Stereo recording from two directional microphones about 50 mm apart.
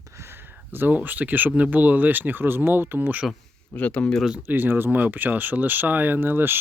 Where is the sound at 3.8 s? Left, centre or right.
Left.